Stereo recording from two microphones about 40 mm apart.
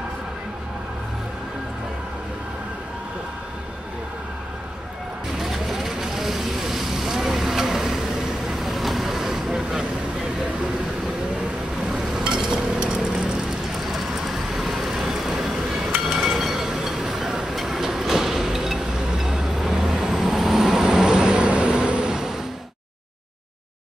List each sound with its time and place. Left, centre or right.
5.4 s vehicle: centre
11.9 s a sound: centre
13.7 s vehicle: centre
16.1 s train: centre; by 22.1 s right
22.1 s vehicle: centre